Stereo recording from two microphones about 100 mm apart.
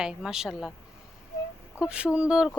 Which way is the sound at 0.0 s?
5° right (ahead or behind).